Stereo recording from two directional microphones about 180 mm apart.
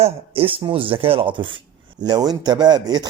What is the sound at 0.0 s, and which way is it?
Speech, 30° right (ahead or behind).